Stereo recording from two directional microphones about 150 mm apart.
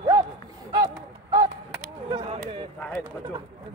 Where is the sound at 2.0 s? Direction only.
30° right (ahead or behind).